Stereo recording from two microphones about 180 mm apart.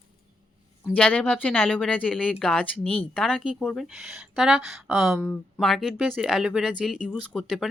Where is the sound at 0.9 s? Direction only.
10° left (ahead or behind).